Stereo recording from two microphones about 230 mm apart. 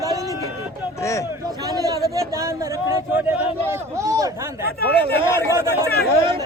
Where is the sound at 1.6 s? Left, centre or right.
Centre.